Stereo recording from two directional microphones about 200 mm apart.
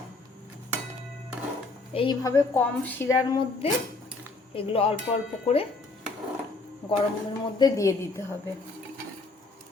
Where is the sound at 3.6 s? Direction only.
30° left (ahead or behind).